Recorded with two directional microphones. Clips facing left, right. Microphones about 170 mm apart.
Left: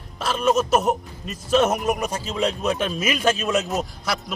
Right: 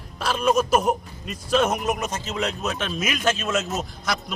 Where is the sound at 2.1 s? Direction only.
30° left (ahead or behind).